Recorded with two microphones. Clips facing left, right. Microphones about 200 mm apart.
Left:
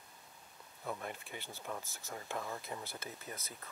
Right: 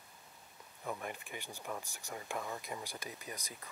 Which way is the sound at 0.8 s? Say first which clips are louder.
Right 1 dB; 15° right (ahead or behind).